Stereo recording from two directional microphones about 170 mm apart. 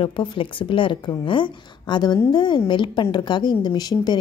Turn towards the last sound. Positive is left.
turn(degrees=25)  # may be behind; listen again after turning